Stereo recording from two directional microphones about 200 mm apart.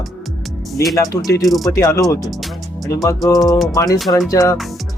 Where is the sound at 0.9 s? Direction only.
15° left (ahead or behind).